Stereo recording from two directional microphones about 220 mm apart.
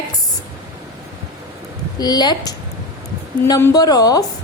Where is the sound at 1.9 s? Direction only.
20° left (ahead or behind).